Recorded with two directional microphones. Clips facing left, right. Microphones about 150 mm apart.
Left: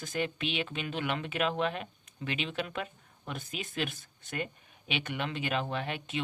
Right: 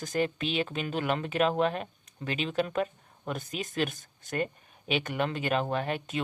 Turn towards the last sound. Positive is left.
turn(degrees=-45)  # may be behind; listen again after turning